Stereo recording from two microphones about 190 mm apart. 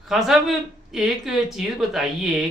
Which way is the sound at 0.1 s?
Centre (ahead or behind).